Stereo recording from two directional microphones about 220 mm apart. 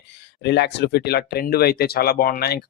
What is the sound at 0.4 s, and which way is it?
Speech, 50° left (ahead or behind).